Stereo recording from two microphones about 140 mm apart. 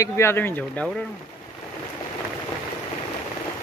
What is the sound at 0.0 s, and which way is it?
Speech, 20° left (ahead or behind).